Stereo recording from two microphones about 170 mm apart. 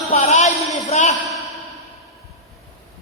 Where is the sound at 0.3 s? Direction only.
40° left (ahead or behind).